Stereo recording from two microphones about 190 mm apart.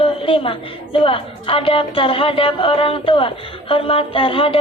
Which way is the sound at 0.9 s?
30° left (ahead or behind).